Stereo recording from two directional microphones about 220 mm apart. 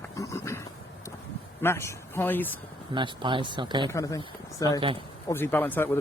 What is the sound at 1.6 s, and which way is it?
Speech, 10° left (ahead or behind).